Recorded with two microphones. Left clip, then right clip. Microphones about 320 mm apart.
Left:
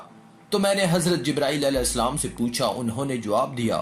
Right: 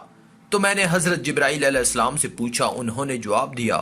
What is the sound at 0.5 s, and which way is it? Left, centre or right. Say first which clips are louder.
A man's voice: right 2 dB; right.